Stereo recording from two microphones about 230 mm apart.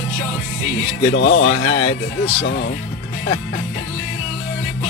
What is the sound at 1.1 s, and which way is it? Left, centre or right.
Speech, left.